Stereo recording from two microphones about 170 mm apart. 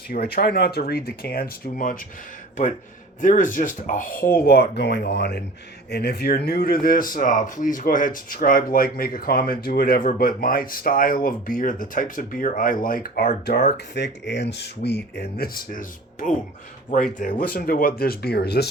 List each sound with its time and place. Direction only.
0.1 s speech: 65° left (ahead or behind)
3.2 s speech: 50° left (ahead or behind); by 18.7 s 75° left (ahead or behind)